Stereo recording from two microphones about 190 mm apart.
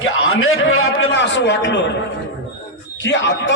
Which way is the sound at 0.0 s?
90° left.